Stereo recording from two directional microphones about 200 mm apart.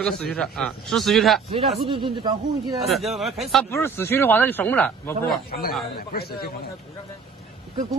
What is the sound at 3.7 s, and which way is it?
Speech, 10° left (ahead or behind).